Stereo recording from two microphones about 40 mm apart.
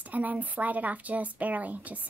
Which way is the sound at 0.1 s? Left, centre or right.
Right.